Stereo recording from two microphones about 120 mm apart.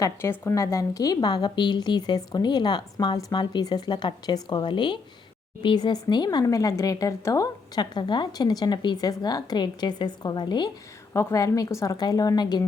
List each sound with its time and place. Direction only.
0.0 s speech: 20° left (ahead or behind); by 10.7 s 40° left (ahead or behind)
11.1 s a woman's voice: 25° left (ahead or behind)